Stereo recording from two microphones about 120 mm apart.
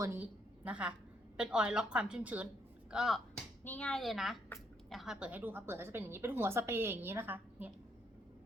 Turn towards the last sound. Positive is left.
turn(degrees=-15)  # may be behind; listen again after turning